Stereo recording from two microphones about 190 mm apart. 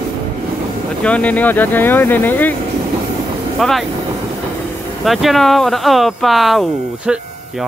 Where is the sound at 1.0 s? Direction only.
5° left (ahead or behind).